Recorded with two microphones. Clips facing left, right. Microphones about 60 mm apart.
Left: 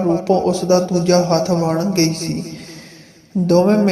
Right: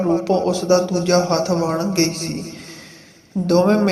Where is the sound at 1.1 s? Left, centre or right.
Right.